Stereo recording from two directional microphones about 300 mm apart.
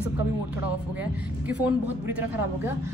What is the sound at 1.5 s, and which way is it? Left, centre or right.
Speech, centre.